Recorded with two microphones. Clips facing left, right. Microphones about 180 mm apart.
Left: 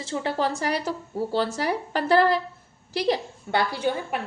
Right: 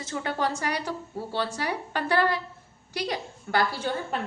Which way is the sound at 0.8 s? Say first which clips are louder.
Left 5 dB; 40° left (ahead or behind).